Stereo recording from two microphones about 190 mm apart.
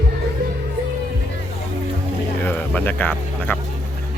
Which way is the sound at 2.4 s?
10° left (ahead or behind).